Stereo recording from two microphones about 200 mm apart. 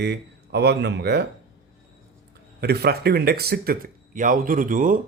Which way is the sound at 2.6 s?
55° right (ahead or behind).